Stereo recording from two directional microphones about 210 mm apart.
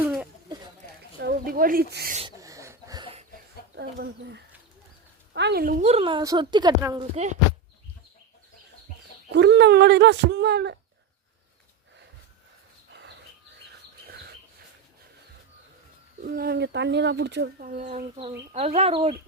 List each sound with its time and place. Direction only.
1.2 s speech: 45° right (ahead or behind)
2.4 s a sound: 15° right (ahead or behind)
3.8 s a woman's voice: 50° right (ahead or behind); by 7.0 s 20° right (ahead or behind)
9.3 s speech: 55° right (ahead or behind)
12.9 s a sound: 55° right (ahead or behind)
16.2 s speech: 45° right (ahead or behind)
17.7 s a woman's voice: 35° right (ahead or behind)